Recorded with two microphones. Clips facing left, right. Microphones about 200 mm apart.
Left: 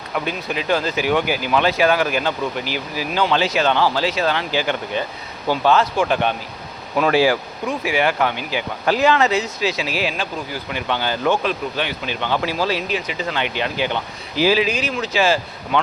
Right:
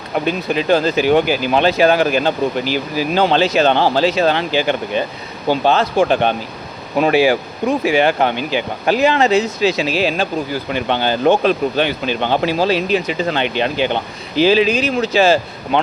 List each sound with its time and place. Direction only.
0.1 s speech: 30° right (ahead or behind)
7.6 s speech: 35° right (ahead or behind)
13.1 s speech: 35° right (ahead or behind)
14.9 s speech: 35° right (ahead or behind)